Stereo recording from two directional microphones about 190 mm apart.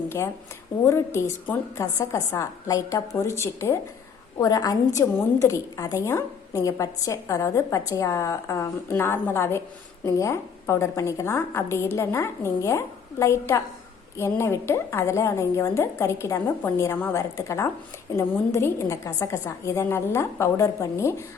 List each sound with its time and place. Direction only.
0.9 s a woman's voice: 15° left (ahead or behind)